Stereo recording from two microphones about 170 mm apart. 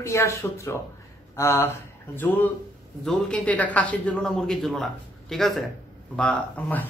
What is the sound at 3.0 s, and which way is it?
Speech, 5° left (ahead or behind).